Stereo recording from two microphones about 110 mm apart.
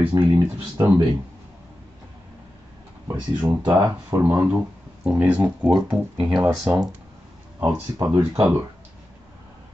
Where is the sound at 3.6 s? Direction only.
30° right (ahead or behind).